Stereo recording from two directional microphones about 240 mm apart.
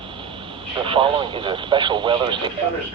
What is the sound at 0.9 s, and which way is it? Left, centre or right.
Speech, right.